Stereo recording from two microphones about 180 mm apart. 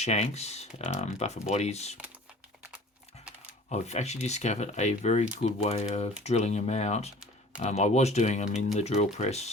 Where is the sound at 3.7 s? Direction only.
40° left (ahead or behind).